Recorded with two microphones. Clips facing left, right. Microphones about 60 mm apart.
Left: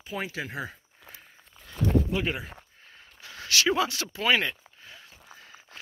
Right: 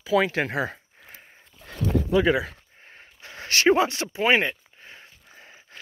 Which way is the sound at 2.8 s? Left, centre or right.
Right.